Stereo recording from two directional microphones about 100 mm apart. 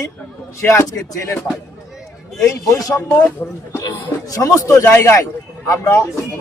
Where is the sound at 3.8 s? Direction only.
40° left (ahead or behind).